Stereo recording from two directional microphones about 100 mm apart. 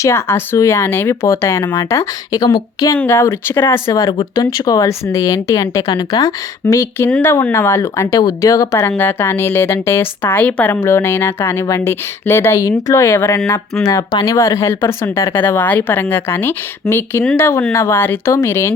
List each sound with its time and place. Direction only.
0.0 s a woman's voice: 25° left (ahead or behind)
3.1 s a woman's voice: 25° left (ahead or behind)
8.9 s a woman's voice: 20° left (ahead or behind)
14.1 s speech: 40° left (ahead or behind)
14.3 s a woman's voice: 30° left (ahead or behind)